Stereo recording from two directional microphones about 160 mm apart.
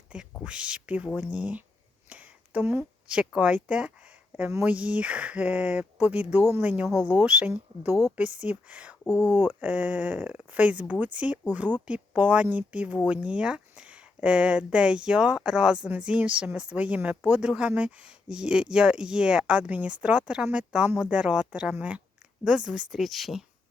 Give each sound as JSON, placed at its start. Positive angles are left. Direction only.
{"t": 0.1, "sound": "a woman's voice", "side_deg": -5}
{"t": 9.0, "sound": "speech", "side_deg": 20}
{"t": 9.4, "sound": "speech", "side_deg": -10}